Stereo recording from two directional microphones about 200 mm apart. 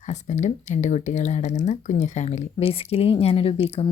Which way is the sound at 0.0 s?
35° left (ahead or behind).